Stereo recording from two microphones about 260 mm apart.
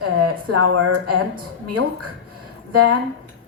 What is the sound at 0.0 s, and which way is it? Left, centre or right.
A woman's voice, right.